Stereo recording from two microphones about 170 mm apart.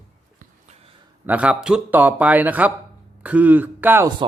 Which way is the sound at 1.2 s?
10° right (ahead or behind).